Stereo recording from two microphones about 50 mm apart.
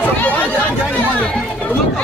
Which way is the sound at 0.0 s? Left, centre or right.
Left.